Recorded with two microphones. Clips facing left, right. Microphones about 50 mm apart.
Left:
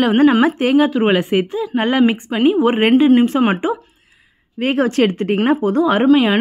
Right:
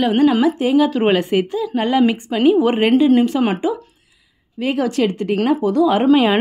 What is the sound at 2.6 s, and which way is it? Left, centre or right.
Speech, left.